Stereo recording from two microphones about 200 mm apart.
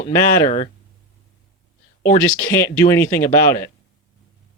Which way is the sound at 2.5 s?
10° left (ahead or behind).